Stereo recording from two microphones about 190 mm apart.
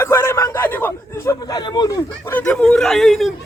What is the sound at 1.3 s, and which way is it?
Speech, 20° left (ahead or behind).